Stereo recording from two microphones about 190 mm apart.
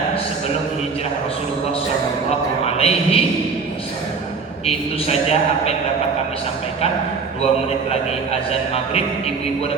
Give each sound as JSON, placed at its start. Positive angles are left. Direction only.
{"t": 2.7, "sound": "a man's voice", "side_deg": 30}
{"t": 4.6, "sound": "a man's voice", "side_deg": 30}
{"t": 7.4, "sound": "a man's voice", "side_deg": 35}